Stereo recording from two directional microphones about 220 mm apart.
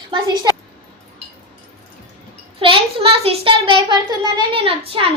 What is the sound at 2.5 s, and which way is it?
A child's voice, 25° right (ahead or behind).